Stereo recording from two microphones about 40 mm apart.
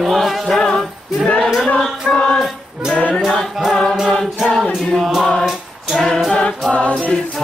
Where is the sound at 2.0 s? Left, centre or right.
Centre.